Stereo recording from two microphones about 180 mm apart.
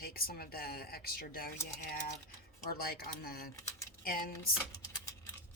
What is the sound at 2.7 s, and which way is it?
Speech, 55° left (ahead or behind).